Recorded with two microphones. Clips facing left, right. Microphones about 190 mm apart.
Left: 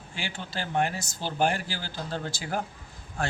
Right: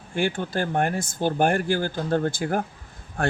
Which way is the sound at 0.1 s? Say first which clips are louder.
Right 12 dB; 55° right (ahead or behind).